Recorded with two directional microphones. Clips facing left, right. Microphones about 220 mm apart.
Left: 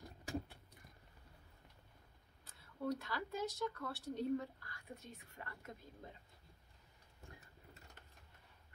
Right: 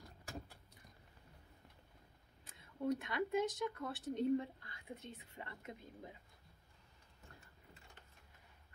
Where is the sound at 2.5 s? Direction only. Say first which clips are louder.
Right 3 dB; 20° right (ahead or behind).